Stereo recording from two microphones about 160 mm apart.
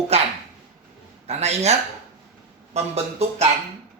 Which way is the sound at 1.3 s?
45° right (ahead or behind).